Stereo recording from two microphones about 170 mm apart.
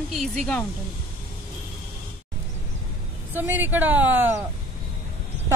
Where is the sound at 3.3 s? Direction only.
10° right (ahead or behind).